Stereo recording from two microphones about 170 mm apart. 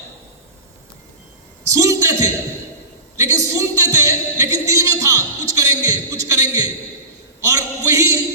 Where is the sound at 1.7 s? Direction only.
20° right (ahead or behind).